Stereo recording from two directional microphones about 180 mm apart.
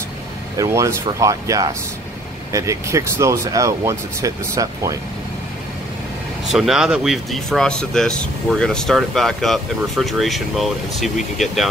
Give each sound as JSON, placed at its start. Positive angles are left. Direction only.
{"t": 0.6, "sound": "speech", "side_deg": -15}
{"t": 6.4, "sound": "speech", "side_deg": 0}